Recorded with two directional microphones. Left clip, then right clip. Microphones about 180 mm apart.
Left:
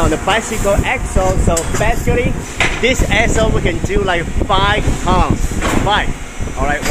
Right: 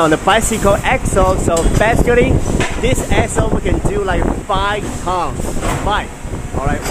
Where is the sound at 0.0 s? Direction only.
40° right (ahead or behind).